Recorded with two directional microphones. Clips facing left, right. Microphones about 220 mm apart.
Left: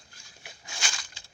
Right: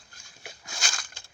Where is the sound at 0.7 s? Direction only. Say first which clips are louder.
Even; 40° right (ahead or behind).